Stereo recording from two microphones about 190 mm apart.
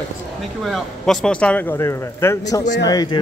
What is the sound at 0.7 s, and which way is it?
Speech, centre (ahead or behind).